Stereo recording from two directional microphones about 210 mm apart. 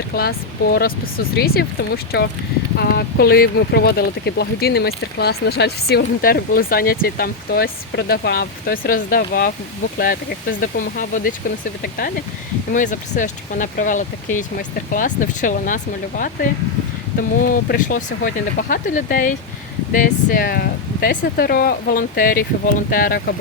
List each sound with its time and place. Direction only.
0.1 s speech: 45° left (ahead or behind)
10.6 s speech: 40° left (ahead or behind)
17.4 s speech: 45° left (ahead or behind)